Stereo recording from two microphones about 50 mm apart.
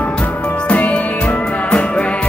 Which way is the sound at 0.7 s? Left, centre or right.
Left.